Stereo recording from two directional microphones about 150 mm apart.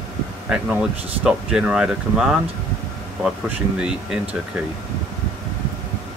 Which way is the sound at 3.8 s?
5° right (ahead or behind).